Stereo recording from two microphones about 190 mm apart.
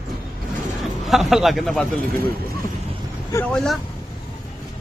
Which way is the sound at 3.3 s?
10° left (ahead or behind).